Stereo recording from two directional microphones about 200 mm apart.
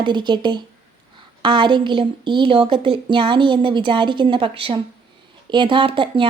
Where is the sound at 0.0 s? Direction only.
20° right (ahead or behind).